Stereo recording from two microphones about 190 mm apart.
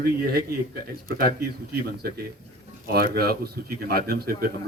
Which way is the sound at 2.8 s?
55° right (ahead or behind).